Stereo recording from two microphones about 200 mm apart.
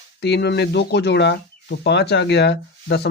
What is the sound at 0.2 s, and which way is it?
Speech, 55° left (ahead or behind).